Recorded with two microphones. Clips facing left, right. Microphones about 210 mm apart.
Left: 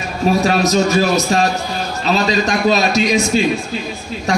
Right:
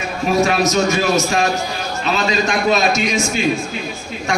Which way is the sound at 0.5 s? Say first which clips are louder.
Left 2 dB; 35° left (ahead or behind).